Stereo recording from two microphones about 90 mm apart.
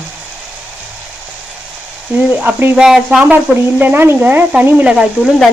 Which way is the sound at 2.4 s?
20° right (ahead or behind).